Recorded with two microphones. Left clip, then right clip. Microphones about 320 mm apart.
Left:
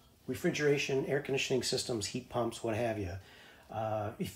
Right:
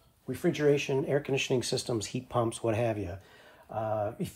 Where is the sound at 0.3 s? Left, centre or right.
Centre.